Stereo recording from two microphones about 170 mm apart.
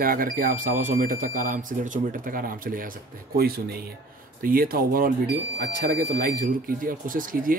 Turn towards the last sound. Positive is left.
turn(degrees=-55)  # may be behind; listen again after turning